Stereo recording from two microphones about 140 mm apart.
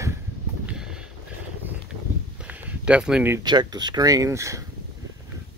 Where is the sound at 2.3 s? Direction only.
10° right (ahead or behind).